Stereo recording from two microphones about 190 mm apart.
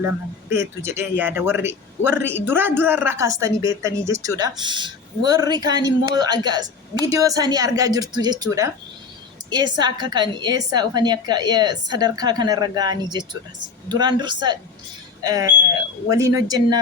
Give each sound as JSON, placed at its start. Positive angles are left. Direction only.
{"t": 0.5, "sound": "a man's voice", "side_deg": -15}